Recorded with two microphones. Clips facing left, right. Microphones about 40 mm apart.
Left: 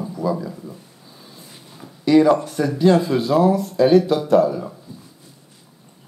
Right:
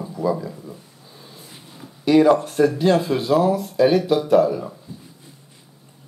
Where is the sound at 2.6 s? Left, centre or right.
Right.